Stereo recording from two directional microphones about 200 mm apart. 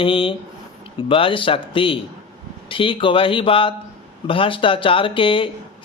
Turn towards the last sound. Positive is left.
turn(degrees=25)  # may be behind; listen again after turning